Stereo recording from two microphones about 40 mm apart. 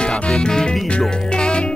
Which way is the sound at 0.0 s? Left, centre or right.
Left.